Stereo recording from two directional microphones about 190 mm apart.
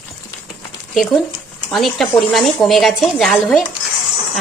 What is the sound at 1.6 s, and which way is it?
Speech, centre (ahead or behind).